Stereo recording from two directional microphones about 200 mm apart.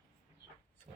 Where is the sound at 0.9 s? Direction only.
30° right (ahead or behind).